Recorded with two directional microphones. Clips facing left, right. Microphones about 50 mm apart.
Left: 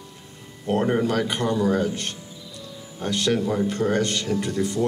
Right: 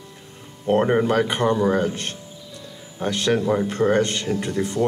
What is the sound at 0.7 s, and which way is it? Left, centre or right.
Speech, right.